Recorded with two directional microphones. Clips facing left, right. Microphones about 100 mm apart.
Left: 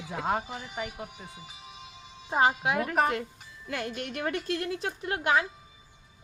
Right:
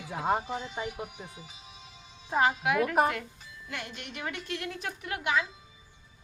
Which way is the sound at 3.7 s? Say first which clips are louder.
Left 7 dB; 45° left (ahead or behind).